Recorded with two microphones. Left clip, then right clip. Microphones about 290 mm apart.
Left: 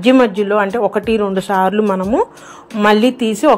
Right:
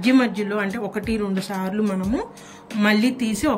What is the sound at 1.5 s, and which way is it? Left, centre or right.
Speech, left.